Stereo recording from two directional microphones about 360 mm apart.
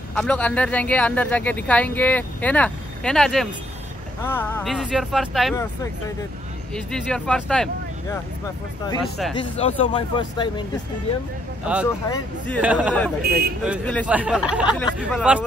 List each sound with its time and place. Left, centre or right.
0.1 s speech: centre
6.7 s speech: centre
9.4 s speech: centre
11.6 s speech: centre
13.2 s speech: right
13.7 s speech: centre